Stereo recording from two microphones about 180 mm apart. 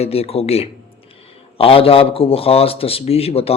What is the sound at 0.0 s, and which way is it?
A man's voice, 35° left (ahead or behind).